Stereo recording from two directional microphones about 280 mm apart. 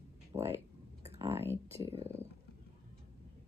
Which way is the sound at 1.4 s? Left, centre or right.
Centre.